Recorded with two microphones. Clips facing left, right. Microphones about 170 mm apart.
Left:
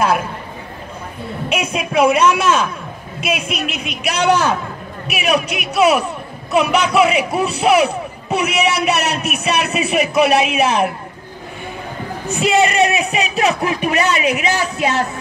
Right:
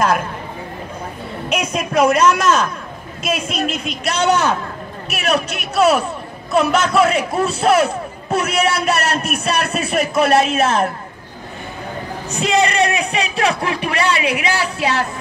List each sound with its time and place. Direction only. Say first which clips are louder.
0.0 s a man's voice: even; 10° left (ahead or behind)
1.5 s a man's voice: right 1 dB; 5° left (ahead or behind)
12.4 s speech: left 2 dB; 20° left (ahead or behind)